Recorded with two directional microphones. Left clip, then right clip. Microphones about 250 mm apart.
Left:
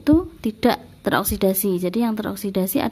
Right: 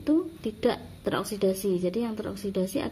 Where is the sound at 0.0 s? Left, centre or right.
Left.